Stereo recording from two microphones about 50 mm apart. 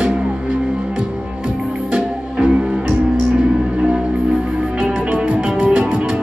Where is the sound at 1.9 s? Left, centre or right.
Right.